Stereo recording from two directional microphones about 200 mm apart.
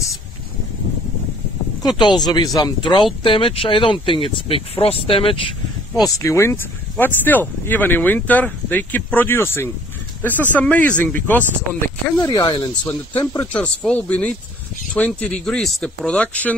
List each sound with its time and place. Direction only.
2.0 s speech: 20° left (ahead or behind)